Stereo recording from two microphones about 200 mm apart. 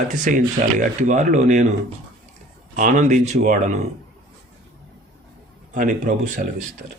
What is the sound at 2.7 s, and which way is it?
Speech, 40° right (ahead or behind).